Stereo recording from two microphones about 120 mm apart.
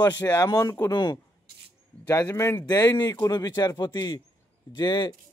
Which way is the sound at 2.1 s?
25° left (ahead or behind).